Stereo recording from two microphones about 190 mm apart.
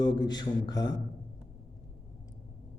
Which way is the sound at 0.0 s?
20° left (ahead or behind).